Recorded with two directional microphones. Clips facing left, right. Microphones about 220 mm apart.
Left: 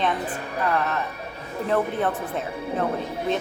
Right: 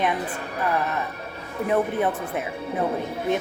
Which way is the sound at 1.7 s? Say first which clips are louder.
Right 1 dB; 15° right (ahead or behind).